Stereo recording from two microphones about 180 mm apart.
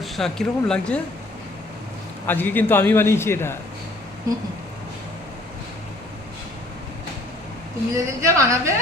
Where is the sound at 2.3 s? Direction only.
10° left (ahead or behind).